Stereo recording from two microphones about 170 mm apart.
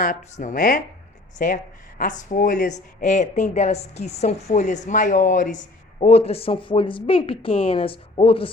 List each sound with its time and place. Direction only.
0.0 s speech: 45° left (ahead or behind)
2.0 s a woman's voice: 50° left (ahead or behind); by 8.4 s 30° left (ahead or behind)